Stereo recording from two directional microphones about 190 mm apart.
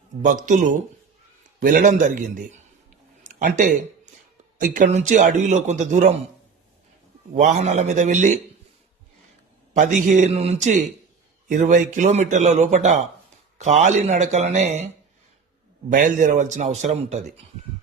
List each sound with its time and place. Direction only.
0.2 s a man's voice: 40° right (ahead or behind)
3.2 s a sound: 40° right (ahead or behind)
4.5 s a man's voice: 45° right (ahead or behind)
7.3 s a man's voice: 40° right (ahead or behind)
9.7 s a man's voice: 40° right (ahead or behind)
15.9 s a man's voice: 45° right (ahead or behind)